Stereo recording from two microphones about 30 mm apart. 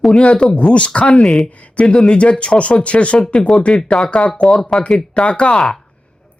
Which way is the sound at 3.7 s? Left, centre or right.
Left.